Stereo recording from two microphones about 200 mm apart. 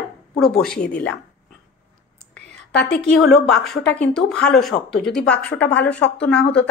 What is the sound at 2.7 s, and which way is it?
Speech, 55° left (ahead or behind).